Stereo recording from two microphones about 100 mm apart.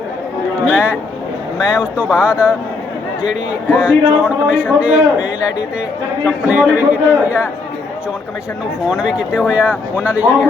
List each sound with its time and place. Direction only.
0.6 s a man's voice: 15° right (ahead or behind)
3.8 s a man's voice: 10° right (ahead or behind)
8.9 s a man's voice: 10° right (ahead or behind)